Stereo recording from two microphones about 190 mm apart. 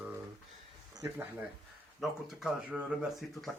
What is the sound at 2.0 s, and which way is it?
Speech, centre (ahead or behind).